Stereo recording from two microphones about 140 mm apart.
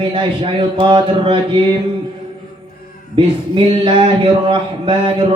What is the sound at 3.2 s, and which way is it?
Speech, 40° right (ahead or behind).